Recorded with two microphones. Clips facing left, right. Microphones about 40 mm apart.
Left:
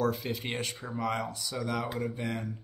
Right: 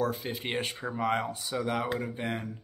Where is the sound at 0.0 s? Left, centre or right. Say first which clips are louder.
Left 1 dB; centre.